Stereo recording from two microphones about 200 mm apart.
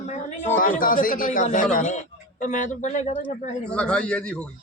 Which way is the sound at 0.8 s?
45° left (ahead or behind).